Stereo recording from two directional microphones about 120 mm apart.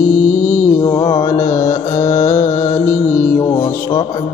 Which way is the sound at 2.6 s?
20° left (ahead or behind).